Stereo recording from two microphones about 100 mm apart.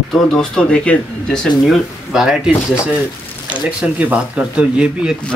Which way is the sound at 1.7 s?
5° right (ahead or behind).